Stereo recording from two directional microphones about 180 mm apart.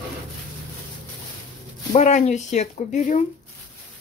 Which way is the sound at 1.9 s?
40° left (ahead or behind).